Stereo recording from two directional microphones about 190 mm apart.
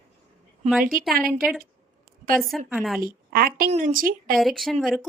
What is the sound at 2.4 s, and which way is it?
Speech, centre (ahead or behind).